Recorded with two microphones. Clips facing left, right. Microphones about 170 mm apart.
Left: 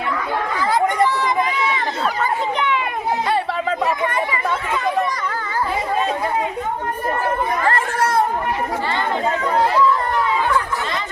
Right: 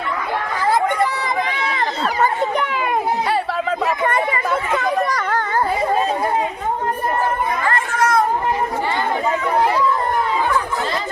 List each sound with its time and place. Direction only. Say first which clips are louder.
2.2 s children playing: right 4 dB; 45° right (ahead or behind)
4.0 s chatter: right 2 dB; 50° right (ahead or behind)
4.7 s children playing: right 1 dB; 70° right (ahead or behind)
7.6 s chatter: right 1 dB; 30° left (ahead or behind)